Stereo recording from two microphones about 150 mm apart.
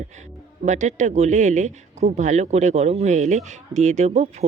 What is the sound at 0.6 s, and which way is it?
Speech, 55° right (ahead or behind).